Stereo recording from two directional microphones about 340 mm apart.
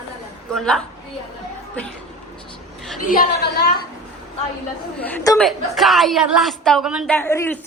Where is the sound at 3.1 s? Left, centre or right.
Left.